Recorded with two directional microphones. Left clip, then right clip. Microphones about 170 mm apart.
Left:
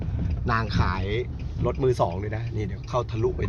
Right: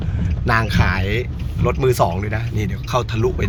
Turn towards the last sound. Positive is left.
turn(degrees=5)  # may be behind; listen again after turning